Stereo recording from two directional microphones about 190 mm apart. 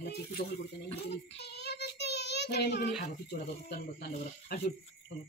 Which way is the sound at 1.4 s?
60° left (ahead or behind).